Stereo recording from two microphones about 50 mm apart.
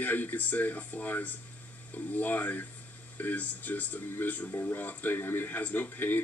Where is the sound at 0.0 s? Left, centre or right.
Left.